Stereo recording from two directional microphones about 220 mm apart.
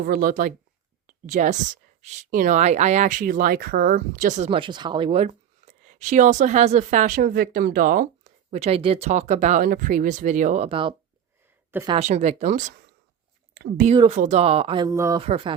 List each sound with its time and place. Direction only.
0.0 s speech: 40° right (ahead or behind)
1.0 s a sound: 35° right (ahead or behind)
2.0 s speech: 35° right (ahead or behind)
11.7 s speech: 15° right (ahead or behind)
11.9 s speech: 30° right (ahead or behind); by 13.8 s 45° right (ahead or behind)
13.8 s speech: 25° right (ahead or behind)
15.3 s speech: 25° right (ahead or behind)